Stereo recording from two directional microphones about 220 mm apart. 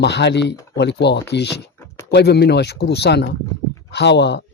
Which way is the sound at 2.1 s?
50° left (ahead or behind).